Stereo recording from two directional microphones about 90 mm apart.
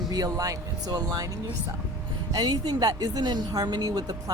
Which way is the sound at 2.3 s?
45° right (ahead or behind).